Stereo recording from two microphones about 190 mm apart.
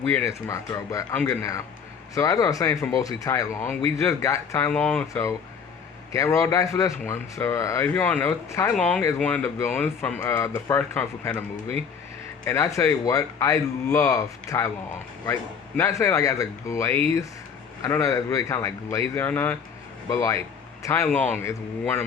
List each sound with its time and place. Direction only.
0.1 s speech: 15° left (ahead or behind)
12.5 s speech: 15° left (ahead or behind)